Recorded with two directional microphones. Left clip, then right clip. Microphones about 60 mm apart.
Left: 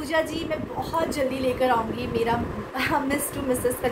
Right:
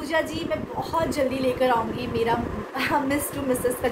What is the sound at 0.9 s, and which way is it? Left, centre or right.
A woman's voice, left.